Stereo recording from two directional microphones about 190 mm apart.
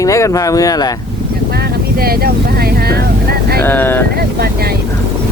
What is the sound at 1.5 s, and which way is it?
Vehicle, 55° right (ahead or behind).